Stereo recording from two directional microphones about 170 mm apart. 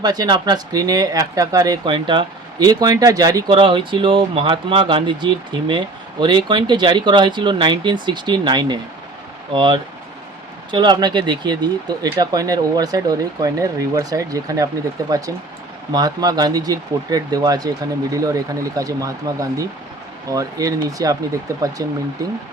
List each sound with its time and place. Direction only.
0.0 s speech: 25° right (ahead or behind)